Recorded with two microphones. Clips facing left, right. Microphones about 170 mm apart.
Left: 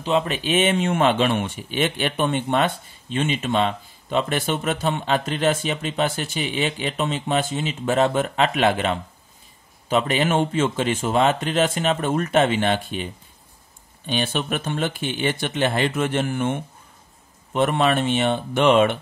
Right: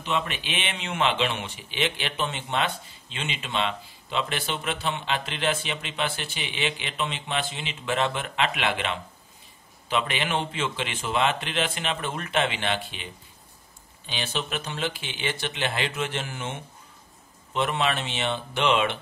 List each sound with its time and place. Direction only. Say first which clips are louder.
0.0 s speech: left 7 dB; 35° left (ahead or behind)